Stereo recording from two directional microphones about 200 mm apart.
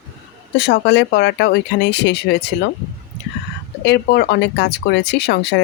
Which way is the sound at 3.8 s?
55° left (ahead or behind).